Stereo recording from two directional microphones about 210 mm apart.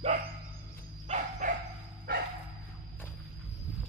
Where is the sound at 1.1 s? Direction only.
35° right (ahead or behind).